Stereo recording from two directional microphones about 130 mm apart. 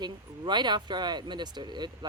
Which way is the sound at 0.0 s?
35° right (ahead or behind).